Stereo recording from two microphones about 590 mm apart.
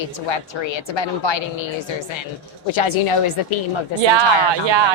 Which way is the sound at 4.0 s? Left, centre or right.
Right.